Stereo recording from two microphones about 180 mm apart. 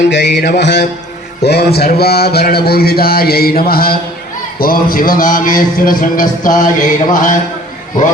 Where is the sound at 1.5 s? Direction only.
65° left (ahead or behind).